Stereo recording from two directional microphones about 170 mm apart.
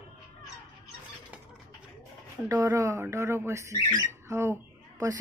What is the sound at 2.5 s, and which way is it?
Speech, 20° right (ahead or behind).